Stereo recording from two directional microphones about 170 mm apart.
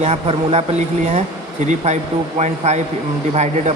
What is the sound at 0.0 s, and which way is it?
Speech, 35° right (ahead or behind).